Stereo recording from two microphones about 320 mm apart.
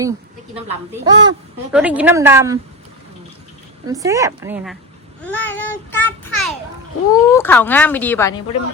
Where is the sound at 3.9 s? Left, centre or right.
Centre.